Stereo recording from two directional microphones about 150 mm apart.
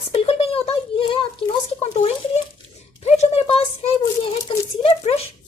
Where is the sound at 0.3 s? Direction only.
40° left (ahead or behind).